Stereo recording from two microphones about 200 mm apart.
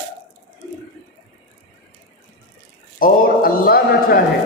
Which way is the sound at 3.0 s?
45° left (ahead or behind).